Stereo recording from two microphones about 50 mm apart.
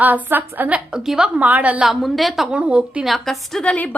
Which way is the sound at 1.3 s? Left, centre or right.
Right.